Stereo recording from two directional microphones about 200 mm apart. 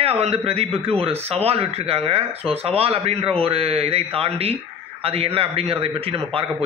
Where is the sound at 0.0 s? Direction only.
30° right (ahead or behind).